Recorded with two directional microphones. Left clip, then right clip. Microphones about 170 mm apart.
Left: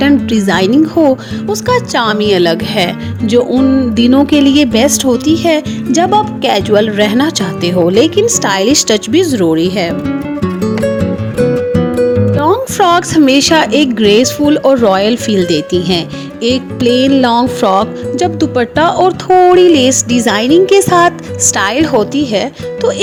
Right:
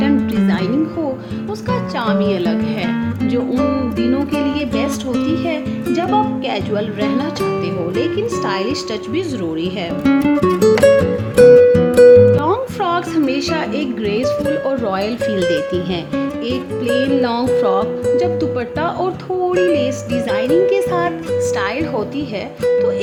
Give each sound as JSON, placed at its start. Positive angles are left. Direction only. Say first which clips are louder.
{"t": 0.0, "sound": "music", "louder": "left 7 dB", "side_deg": 45}
{"t": 1.6, "sound": "speech", "louder": "left 9 dB", "side_deg": 50}
{"t": 10.1, "sound": "music", "louder": "right 3 dB", "side_deg": 0}
{"t": 12.4, "sound": "speech", "louder": "left 7 dB", "side_deg": 40}
{"t": 15.4, "sound": "music", "louder": "left 5 dB", "side_deg": 35}
{"t": 17.2, "sound": "speech", "louder": "left 5 dB", "side_deg": 45}
{"t": 19.6, "sound": "speech", "louder": "left 8 dB", "side_deg": 55}